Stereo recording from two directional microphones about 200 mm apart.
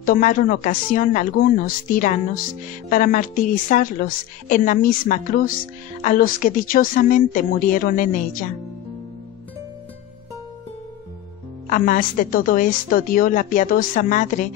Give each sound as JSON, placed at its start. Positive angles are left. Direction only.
{"t": 0.0, "sound": "speech", "side_deg": 45}
{"t": 11.7, "sound": "speech", "side_deg": 40}